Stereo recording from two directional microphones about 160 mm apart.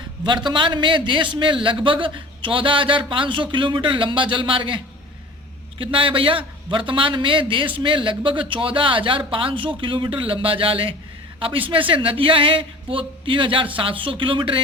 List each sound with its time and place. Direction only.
0.4 s a man's voice: 30° right (ahead or behind)
5.8 s a man's voice: 35° right (ahead or behind)